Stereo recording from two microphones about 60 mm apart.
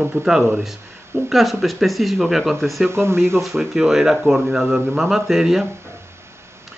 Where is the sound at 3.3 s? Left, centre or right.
Centre.